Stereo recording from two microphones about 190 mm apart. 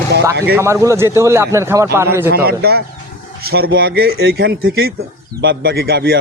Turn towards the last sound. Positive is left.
turn(degrees=-55)  # may be behind; listen again after turning